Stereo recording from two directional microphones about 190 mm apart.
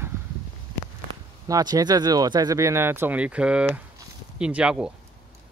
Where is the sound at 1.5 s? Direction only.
20° right (ahead or behind).